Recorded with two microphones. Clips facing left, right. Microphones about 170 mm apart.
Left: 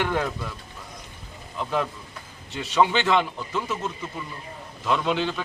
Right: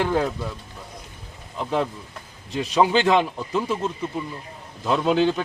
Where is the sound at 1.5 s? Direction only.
30° right (ahead or behind).